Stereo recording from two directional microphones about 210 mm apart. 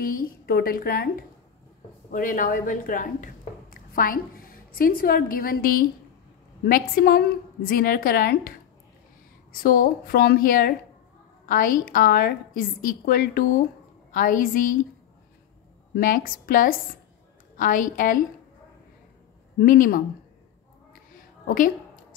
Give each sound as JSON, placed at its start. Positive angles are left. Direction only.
{"t": 0.0, "sound": "a woman's voice", "side_deg": 45}
{"t": 15.9, "sound": "a woman's voice", "side_deg": 40}
{"t": 19.6, "sound": "a woman's voice", "side_deg": 40}
{"t": 20.9, "sound": "a sound", "side_deg": 40}